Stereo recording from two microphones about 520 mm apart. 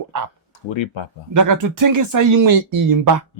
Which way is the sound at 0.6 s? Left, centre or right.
Left.